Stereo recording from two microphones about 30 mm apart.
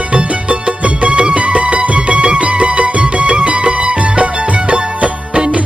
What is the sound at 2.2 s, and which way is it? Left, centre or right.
Music, right.